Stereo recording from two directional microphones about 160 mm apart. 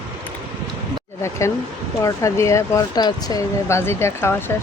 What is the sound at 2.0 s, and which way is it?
Speech, 20° left (ahead or behind).